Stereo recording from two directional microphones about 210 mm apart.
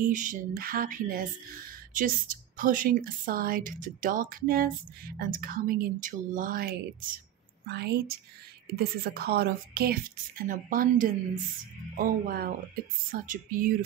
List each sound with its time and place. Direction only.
0.0 s a woman's voice: 40° right (ahead or behind)